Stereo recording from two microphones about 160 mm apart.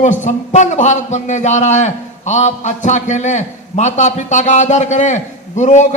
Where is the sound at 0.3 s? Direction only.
45° left (ahead or behind).